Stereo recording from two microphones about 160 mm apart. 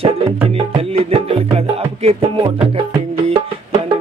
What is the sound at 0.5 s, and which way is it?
Music, 35° right (ahead or behind).